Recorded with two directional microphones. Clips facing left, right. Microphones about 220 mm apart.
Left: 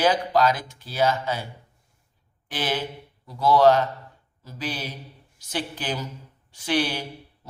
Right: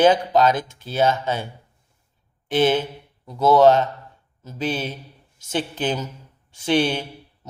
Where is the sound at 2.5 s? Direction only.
25° right (ahead or behind).